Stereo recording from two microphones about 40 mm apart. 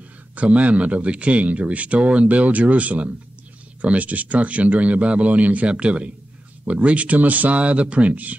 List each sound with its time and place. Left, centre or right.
0.4 s speech: right